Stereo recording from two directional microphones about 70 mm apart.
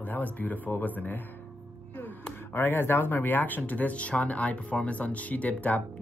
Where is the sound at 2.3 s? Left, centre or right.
Left.